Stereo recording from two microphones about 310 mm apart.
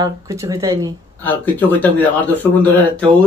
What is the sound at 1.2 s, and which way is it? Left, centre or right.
Speech, centre.